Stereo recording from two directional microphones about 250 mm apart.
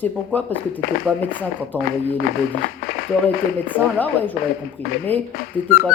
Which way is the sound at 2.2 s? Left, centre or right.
Left.